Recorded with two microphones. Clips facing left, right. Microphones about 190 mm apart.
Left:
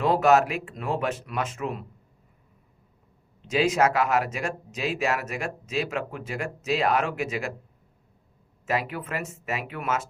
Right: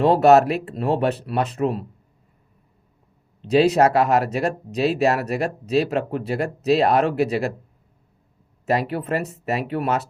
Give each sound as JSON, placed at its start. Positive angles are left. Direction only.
{"t": 0.0, "sound": "speech", "side_deg": -35}
{"t": 3.4, "sound": "speech", "side_deg": -35}
{"t": 8.6, "sound": "speech", "side_deg": -35}